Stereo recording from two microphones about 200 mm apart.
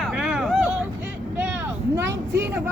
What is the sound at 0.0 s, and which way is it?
Vehicle, centre (ahead or behind).